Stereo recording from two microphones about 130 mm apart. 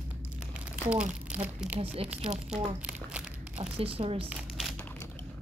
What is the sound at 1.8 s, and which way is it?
Speech, 50° right (ahead or behind).